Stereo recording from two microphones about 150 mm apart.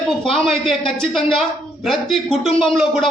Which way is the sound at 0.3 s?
Centre (ahead or behind).